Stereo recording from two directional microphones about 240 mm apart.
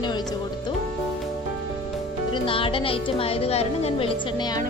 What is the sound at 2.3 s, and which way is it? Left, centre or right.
A woman's voice, left.